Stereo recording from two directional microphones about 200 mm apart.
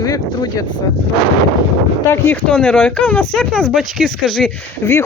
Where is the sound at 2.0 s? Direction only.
10° left (ahead or behind).